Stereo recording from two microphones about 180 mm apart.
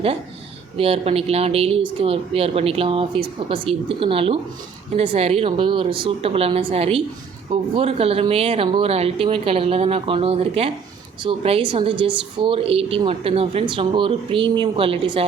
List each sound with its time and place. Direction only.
0.8 s a woman's voice: 35° right (ahead or behind)